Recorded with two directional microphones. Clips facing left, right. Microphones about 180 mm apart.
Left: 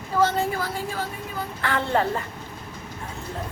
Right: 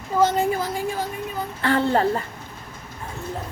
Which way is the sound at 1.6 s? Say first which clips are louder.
Right 4 dB; 35° right (ahead or behind).